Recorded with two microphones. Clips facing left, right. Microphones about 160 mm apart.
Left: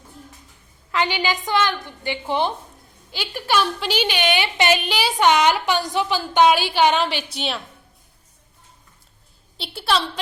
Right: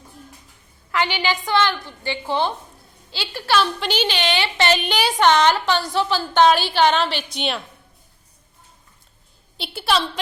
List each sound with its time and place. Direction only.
0.9 s a woman's voice: 15° left (ahead or behind); by 7.6 s centre (ahead or behind)
9.6 s a woman's voice: centre (ahead or behind)